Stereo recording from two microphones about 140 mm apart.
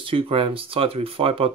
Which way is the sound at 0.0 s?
40° right (ahead or behind).